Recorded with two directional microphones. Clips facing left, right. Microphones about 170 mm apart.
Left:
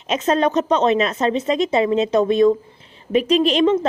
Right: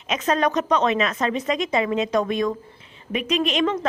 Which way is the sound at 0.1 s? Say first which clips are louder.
Left 4 dB; 30° left (ahead or behind).